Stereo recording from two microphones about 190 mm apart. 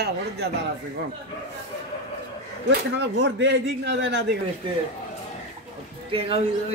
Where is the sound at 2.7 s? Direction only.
65° right (ahead or behind).